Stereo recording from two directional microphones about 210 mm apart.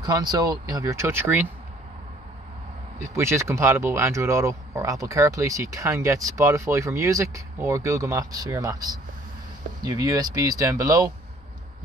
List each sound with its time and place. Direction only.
0.0 s speech: 20° right (ahead or behind)
3.0 s speech: 15° right (ahead or behind)